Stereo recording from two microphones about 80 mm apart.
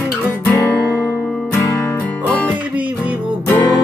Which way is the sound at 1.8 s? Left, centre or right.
Centre.